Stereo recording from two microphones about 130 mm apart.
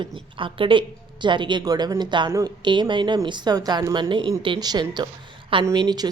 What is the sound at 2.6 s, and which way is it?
Speech, 35° right (ahead or behind).